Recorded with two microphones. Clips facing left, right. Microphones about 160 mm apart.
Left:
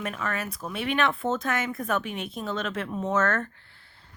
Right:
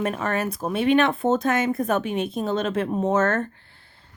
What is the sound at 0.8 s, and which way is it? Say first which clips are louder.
Speech: right 7 dB; 25° right (ahead or behind).